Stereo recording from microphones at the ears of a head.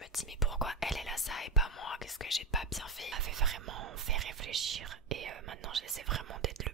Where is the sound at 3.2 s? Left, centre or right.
Right.